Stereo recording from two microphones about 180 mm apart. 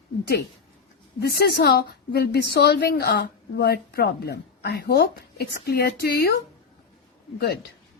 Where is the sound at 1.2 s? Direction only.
65° left (ahead or behind).